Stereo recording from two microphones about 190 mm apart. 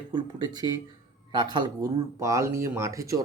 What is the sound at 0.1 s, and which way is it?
Speech, 25° right (ahead or behind).